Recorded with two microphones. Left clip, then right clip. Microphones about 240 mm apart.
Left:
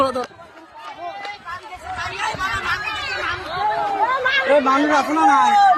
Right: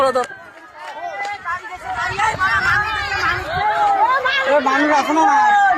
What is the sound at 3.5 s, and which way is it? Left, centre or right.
Chatter, right.